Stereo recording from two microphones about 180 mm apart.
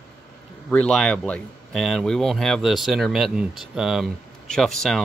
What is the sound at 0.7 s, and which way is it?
Speech, 5° left (ahead or behind).